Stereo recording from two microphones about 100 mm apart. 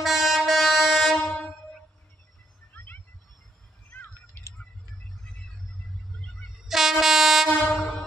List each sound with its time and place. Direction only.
0.0 s train: centre (ahead or behind)
2.7 s a sound: 20° left (ahead or behind)
6.7 s train: 5° right (ahead or behind)